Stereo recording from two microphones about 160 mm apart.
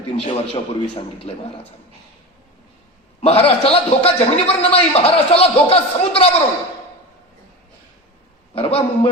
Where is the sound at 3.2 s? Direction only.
35° left (ahead or behind).